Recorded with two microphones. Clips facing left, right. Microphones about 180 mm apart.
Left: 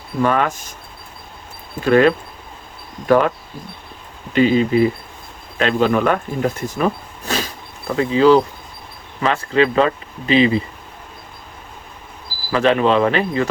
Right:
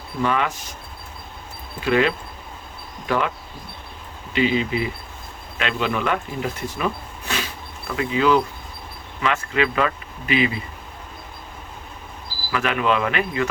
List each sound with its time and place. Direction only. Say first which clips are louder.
0.2 s speech: left 5 dB; 45° left (ahead or behind)
1.8 s speech: left 7 dB; 45° left (ahead or behind)
4.4 s speech: left 7 dB; 45° left (ahead or behind); by 10.6 s 30° left (ahead or behind)
12.5 s speech: left 6 dB; 35° left (ahead or behind)